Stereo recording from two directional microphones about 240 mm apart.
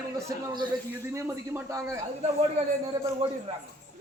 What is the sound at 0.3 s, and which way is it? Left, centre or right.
A man's voice, centre.